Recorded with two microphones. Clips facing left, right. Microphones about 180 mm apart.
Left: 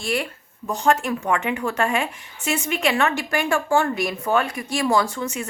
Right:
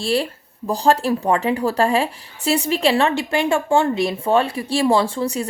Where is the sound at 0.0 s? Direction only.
30° right (ahead or behind).